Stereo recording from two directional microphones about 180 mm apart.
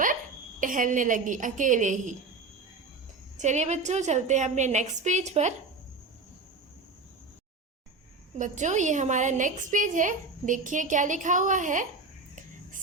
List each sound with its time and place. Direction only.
0.6 s a woman's voice: 45° right (ahead or behind)
3.3 s a woman's voice: 40° right (ahead or behind)
8.4 s a woman's voice: 40° right (ahead or behind)